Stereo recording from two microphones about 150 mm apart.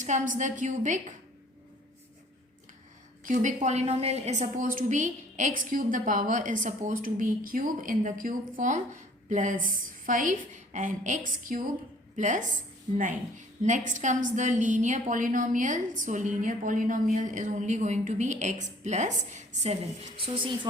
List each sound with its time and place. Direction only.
0.0 s a woman's voice: 55° right (ahead or behind)
3.2 s a woman's voice: 55° right (ahead or behind); by 20.5 s 35° right (ahead or behind)